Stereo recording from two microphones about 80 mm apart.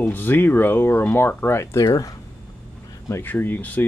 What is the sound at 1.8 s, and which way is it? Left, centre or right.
Speech, left.